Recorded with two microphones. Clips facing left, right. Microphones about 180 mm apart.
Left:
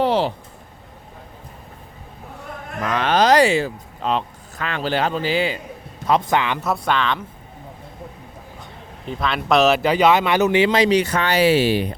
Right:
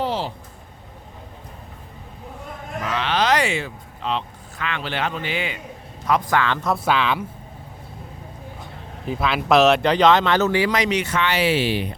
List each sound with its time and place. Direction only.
0.0 s a sound: 70° left (ahead or behind)
2.8 s a man's voice: 50° left (ahead or behind); by 6.6 s 20° left (ahead or behind)
6.6 s speech: centre (ahead or behind)
9.0 s speech: 5° right (ahead or behind); by 11.9 s 40° left (ahead or behind)